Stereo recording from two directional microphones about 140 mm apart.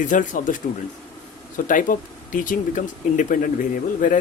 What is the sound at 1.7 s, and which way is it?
Speech, 70° left (ahead or behind).